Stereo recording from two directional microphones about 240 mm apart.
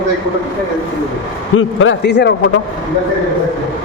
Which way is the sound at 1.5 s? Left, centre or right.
Left.